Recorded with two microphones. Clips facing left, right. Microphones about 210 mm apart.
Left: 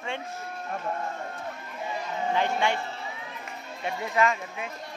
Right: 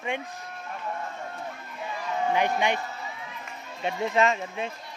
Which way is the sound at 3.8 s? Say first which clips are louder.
Right 2 dB; 25° right (ahead or behind).